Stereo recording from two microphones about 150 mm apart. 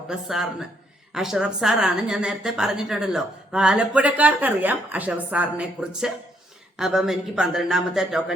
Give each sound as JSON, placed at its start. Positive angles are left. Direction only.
{"t": 0.1, "sound": "a woman's voice", "side_deg": -5}